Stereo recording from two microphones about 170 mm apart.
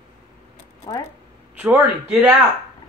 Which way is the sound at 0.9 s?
25° left (ahead or behind).